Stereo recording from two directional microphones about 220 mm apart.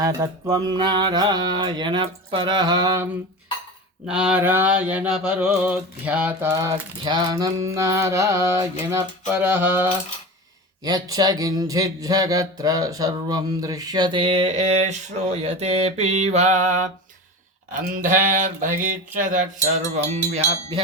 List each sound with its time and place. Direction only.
0.0 s mantra: 15° right (ahead or behind)
4.0 s speech: 5° right (ahead or behind); by 16.8 s 35° right (ahead or behind)
17.7 s a sound: 40° right (ahead or behind)